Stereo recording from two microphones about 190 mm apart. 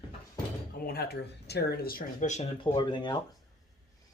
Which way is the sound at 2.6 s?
25° left (ahead or behind).